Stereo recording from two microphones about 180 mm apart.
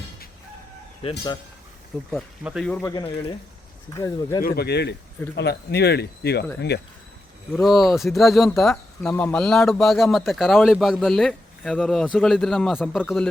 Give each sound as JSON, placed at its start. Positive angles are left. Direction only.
{"t": 2.0, "sound": "speech", "side_deg": -5}
{"t": 2.9, "sound": "speech", "side_deg": 30}
{"t": 4.4, "sound": "speech", "side_deg": 65}
{"t": 7.6, "sound": "speech", "side_deg": 0}